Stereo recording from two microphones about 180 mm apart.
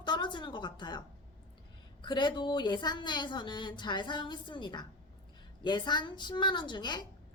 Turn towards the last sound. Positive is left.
turn(degrees=25)  # may be behind; listen again after turning